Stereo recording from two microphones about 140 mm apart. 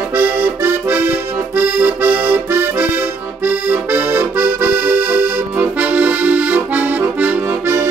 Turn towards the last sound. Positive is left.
turn(degrees=-15)  # may be behind; listen again after turning